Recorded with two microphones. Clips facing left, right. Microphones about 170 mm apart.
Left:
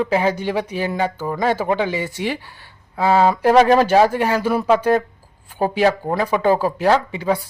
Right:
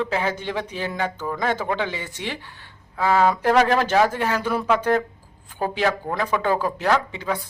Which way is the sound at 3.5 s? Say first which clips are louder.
Left 8 dB; 20° left (ahead or behind).